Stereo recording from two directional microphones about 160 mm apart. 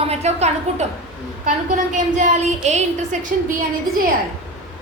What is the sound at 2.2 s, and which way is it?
A woman's voice, 45° right (ahead or behind).